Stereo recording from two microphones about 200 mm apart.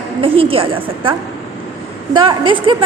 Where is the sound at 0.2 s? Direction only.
25° right (ahead or behind).